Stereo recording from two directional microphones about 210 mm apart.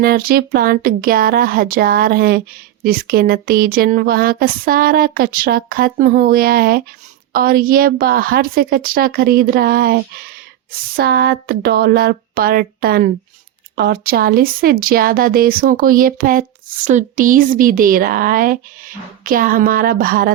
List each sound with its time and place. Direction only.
0.0 s speech: 45° right (ahead or behind)